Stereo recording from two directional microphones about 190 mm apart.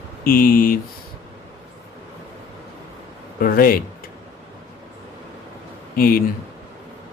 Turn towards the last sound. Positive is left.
turn(degrees=50)  # may be behind; listen again after turning